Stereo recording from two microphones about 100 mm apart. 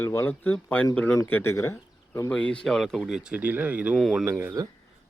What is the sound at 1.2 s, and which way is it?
Speech, 25° left (ahead or behind).